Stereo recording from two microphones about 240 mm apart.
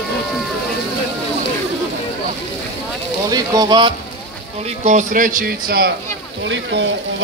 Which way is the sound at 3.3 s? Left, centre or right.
Centre.